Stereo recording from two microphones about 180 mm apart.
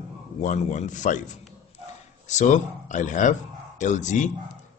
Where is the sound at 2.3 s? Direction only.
40° left (ahead or behind).